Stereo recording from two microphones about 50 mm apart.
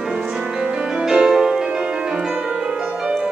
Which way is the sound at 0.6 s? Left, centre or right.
Centre.